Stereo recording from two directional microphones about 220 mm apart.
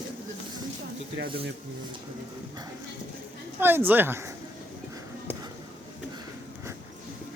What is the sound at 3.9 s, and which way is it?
Speech, 10° right (ahead or behind).